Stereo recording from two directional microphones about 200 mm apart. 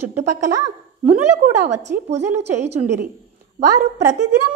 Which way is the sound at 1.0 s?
35° right (ahead or behind).